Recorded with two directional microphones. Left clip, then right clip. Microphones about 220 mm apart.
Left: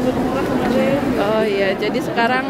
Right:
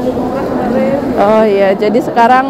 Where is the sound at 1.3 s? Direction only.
15° right (ahead or behind).